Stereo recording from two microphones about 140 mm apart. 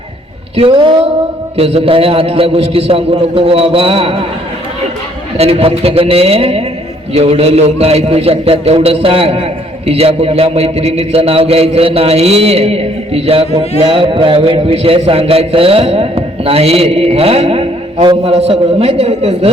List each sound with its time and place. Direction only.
0.5 s a sound: 40° right (ahead or behind)
1.5 s a man's voice: 45° right (ahead or behind)
5.4 s a man's voice: 45° right (ahead or behind)